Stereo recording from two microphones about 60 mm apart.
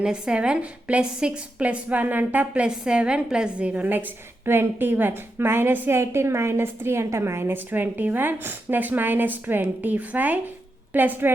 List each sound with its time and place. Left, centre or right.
0.0 s a woman's voice: centre; by 2.5 s right
2.5 s a woman's voice: centre
3.8 s a woman's voice: right
5.9 s a woman's voice: right